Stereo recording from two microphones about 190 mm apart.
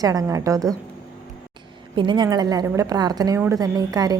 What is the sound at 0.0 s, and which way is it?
Speech, 20° right (ahead or behind).